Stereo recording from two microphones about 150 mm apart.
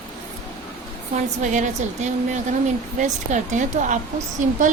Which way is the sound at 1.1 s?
55° right (ahead or behind).